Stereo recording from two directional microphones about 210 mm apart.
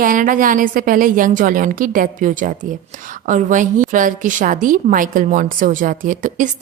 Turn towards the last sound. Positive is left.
turn(degrees=-35)  # may be behind; listen again after turning